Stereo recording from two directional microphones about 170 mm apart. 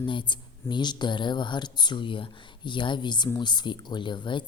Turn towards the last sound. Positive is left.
turn(degrees=30)  # may be behind; listen again after turning